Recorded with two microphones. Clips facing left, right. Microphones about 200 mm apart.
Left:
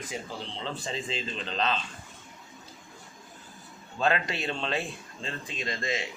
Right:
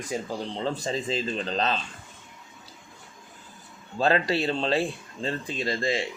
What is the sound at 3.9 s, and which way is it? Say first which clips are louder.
Speech: right 5 dB; 35° right (ahead or behind).